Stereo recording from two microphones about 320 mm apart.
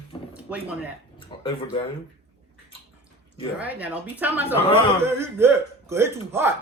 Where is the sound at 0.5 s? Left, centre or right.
Centre.